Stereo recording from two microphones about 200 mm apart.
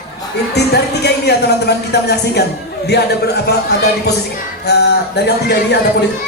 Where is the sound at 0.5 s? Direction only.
55° left (ahead or behind).